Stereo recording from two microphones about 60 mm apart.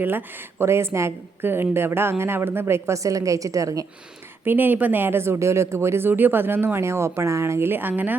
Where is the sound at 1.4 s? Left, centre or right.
Right.